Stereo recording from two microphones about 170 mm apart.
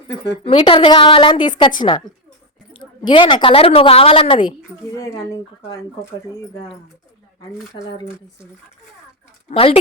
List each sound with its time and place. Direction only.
0.4 s a woman's voice: 30° left (ahead or behind)
4.9 s speech: 15° left (ahead or behind)
7.7 s speech: 45° left (ahead or behind)
9.5 s a woman's voice: 35° left (ahead or behind)